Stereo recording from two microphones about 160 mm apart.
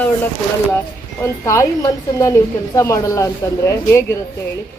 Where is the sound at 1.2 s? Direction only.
20° left (ahead or behind).